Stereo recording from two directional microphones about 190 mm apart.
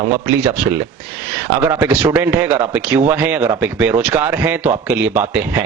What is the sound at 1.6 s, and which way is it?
A man's voice, 10° right (ahead or behind).